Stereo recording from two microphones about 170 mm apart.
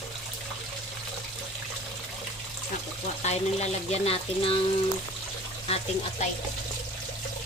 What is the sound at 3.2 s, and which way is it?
Speech, 40° left (ahead or behind).